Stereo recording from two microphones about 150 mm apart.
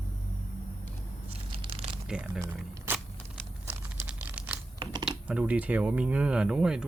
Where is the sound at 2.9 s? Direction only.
15° right (ahead or behind).